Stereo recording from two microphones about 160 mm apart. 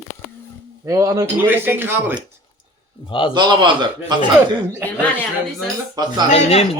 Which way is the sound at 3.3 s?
30° right (ahead or behind).